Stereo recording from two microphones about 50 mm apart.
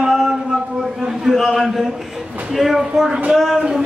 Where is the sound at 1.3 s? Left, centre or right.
Centre.